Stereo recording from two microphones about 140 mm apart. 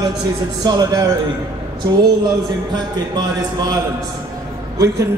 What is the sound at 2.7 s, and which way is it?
A man's voice, 30° right (ahead or behind).